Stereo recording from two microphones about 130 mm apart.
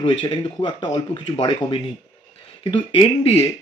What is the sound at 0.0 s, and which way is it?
Speech, 40° left (ahead or behind).